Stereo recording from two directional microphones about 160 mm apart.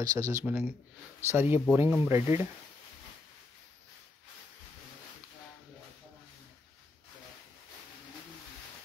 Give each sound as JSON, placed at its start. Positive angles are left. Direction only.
{"t": 0.0, "sound": "speech", "side_deg": -20}